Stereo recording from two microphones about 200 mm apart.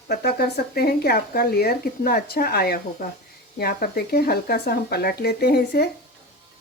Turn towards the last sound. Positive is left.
turn(degrees=55)  # may be behind; listen again after turning